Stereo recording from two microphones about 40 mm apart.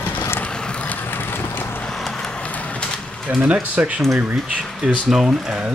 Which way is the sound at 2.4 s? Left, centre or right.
Left.